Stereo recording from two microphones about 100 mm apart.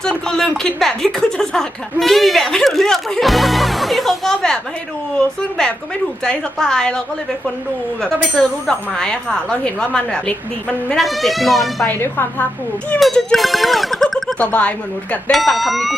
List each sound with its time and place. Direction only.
0.0 s speech: 5° left (ahead or behind)
8.0 s speech: 5° left (ahead or behind)
11.0 s speech: centre (ahead or behind)
11.9 s speech: 20° left (ahead or behind)
13.0 s speech: 5° left (ahead or behind)
14.3 s speech: 15° left (ahead or behind)
15.3 s speech: centre (ahead or behind)